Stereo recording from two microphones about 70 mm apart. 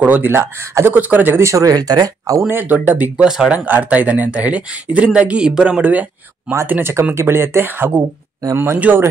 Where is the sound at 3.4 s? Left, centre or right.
Right.